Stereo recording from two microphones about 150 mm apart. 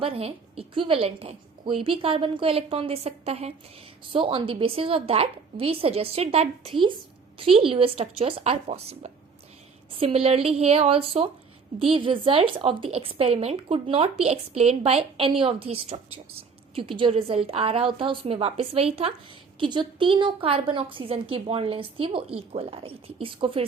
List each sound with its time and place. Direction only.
0.0 s a woman's voice: 40° right (ahead or behind)